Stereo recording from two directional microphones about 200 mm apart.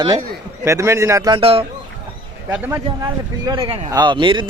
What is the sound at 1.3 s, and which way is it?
Speech, 30° right (ahead or behind).